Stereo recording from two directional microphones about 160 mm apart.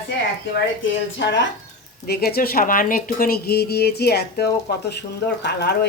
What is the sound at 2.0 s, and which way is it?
Speech, 85° left.